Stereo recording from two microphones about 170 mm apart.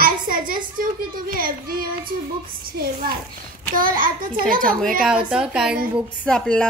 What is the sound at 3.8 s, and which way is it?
A child's voice, 55° right (ahead or behind).